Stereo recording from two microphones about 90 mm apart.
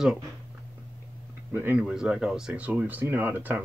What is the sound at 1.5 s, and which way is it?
Speech, 20° right (ahead or behind).